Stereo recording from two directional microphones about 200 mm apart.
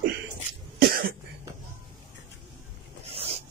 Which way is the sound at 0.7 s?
50° right (ahead or behind).